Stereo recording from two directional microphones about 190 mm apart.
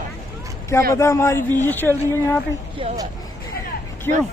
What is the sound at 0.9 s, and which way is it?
A man's voice, 15° left (ahead or behind).